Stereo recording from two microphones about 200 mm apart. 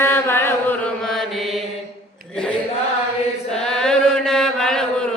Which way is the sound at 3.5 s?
5° left (ahead or behind).